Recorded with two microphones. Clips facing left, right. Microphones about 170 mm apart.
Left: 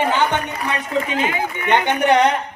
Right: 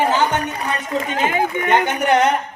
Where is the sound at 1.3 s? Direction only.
45° right (ahead or behind).